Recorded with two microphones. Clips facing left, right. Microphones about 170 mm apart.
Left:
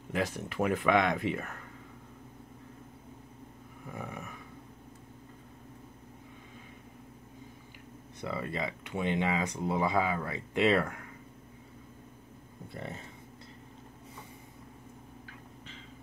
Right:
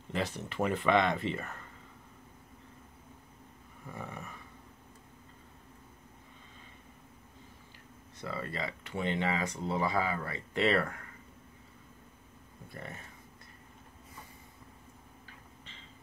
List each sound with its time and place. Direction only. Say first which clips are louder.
0.1 s speech: left 2 dB; 10° left (ahead or behind)
3.9 s speech: left 2 dB; 10° left (ahead or behind)
8.2 s speech: left 3 dB; 20° left (ahead or behind)
12.6 s speech: left 4 dB; 20° left (ahead or behind)